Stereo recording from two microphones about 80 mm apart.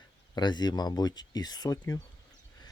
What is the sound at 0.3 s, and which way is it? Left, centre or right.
Speech, left.